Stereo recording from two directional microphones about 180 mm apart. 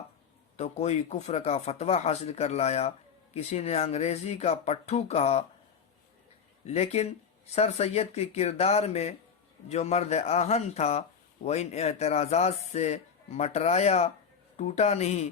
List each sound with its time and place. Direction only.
0.5 s speech: 35° left (ahead or behind)
6.7 s speech: 35° left (ahead or behind)